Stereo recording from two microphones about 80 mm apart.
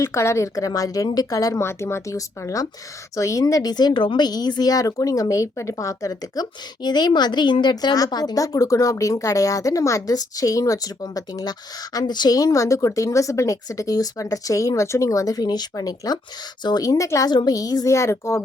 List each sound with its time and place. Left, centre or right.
0.0 s speech: left
1.6 s speech: left
3.4 s speech: left
17.9 s speech: left